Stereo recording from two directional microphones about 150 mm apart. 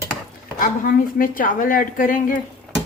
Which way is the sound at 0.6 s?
70° left (ahead or behind).